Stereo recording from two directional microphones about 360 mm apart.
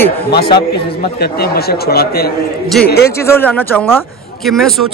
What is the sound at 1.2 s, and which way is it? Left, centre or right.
Speech, left.